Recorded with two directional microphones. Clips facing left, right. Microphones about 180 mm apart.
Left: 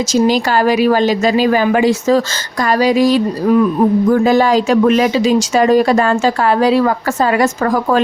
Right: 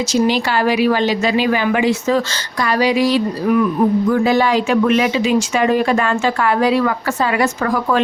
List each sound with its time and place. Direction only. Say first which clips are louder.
0.1 s a woman's voice: left 4 dB; 40° left (ahead or behind)